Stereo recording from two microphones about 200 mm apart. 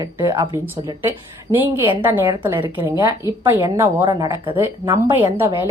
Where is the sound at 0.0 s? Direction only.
20° right (ahead or behind).